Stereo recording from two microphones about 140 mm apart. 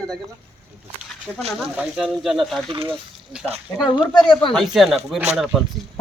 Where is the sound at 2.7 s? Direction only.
40° right (ahead or behind).